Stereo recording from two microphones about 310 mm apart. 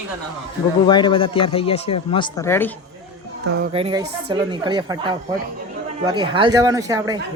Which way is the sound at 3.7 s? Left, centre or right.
Centre.